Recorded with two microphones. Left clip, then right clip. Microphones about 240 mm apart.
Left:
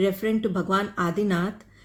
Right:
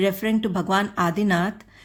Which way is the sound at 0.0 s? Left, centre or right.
Right.